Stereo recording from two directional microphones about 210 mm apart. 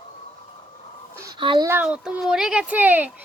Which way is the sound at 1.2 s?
20° right (ahead or behind).